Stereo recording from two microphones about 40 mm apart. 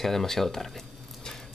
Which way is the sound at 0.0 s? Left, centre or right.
Centre.